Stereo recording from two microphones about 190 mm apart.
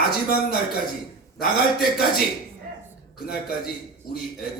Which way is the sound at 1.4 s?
55° left (ahead or behind).